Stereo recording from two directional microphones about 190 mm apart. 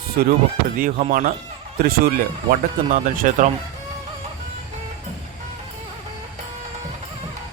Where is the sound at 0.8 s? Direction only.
50° right (ahead or behind).